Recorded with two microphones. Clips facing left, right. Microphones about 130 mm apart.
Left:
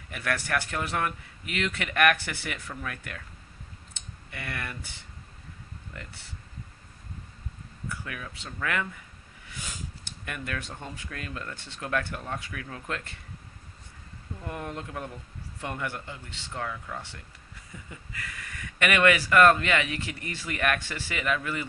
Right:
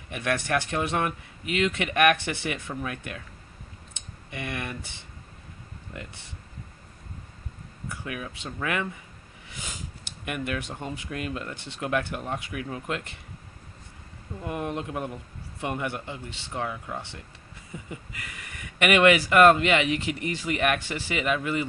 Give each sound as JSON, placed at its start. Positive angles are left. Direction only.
{"t": 0.1, "sound": "speech", "side_deg": -20}
{"t": 4.3, "sound": "speech", "side_deg": -20}
{"t": 7.9, "sound": "speech", "side_deg": -20}
{"t": 10.2, "sound": "speech", "side_deg": -15}
{"t": 14.4, "sound": "speech", "side_deg": -20}